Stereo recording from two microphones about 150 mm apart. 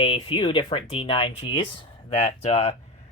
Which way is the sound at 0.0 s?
35° left (ahead or behind).